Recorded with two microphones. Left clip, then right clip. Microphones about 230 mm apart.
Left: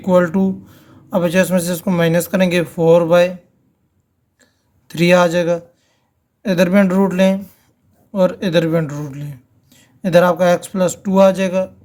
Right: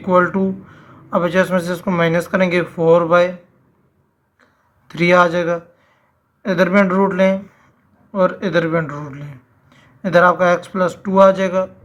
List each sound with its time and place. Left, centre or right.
0.0 s speech: left
4.9 s speech: left